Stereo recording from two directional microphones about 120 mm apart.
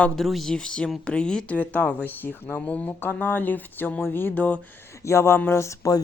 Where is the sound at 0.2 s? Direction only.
Centre (ahead or behind).